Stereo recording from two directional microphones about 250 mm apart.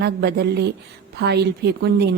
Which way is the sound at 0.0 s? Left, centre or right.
Right.